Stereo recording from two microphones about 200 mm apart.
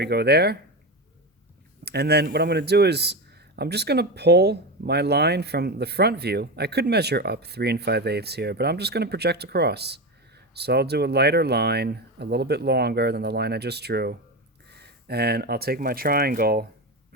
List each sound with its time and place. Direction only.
0.0 s speech: 55° right (ahead or behind)
1.8 s a man's voice: 55° right (ahead or behind)